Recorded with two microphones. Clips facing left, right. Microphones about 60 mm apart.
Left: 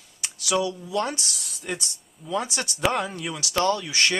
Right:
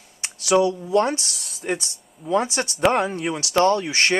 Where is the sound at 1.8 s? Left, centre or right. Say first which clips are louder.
Right 2 dB; right.